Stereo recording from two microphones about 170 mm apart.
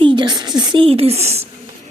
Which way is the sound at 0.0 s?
25° right (ahead or behind).